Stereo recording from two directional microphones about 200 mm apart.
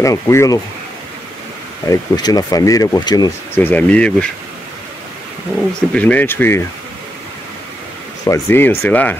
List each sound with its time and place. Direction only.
0.0 s speech: 15° left (ahead or behind)
1.9 s speech: 20° left (ahead or behind)
5.8 s speech: 5° left (ahead or behind)
8.3 s speech: 10° left (ahead or behind)